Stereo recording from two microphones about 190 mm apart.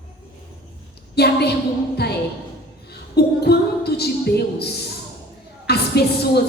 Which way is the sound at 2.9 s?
55° left (ahead or behind).